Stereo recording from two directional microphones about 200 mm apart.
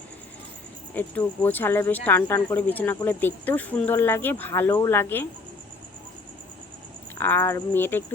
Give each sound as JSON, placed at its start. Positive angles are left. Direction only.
{"t": 0.9, "sound": "speech", "side_deg": 10}
{"t": 7.2, "sound": "speech", "side_deg": 10}